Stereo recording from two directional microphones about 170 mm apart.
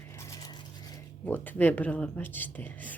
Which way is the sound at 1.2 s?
10° left (ahead or behind).